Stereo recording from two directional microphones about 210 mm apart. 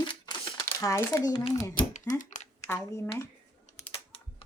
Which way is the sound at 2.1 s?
35° left (ahead or behind).